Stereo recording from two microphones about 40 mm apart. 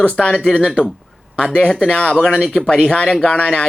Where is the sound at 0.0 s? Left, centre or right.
Left.